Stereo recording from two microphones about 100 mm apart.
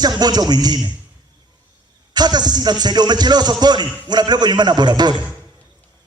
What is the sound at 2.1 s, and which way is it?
A man's voice, 45° right (ahead or behind).